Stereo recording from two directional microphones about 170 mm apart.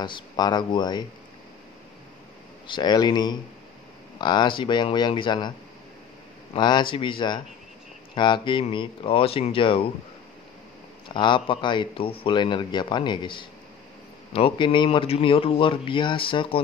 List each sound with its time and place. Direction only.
0.0 s speech: 25° left (ahead or behind)
2.6 s speech: 25° left (ahead or behind)
6.5 s speech: 30° left (ahead or behind)
11.1 s speech: 30° left (ahead or behind)